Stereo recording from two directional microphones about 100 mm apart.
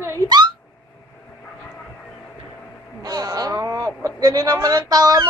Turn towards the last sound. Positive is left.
turn(degrees=-40)  # may be behind; listen again after turning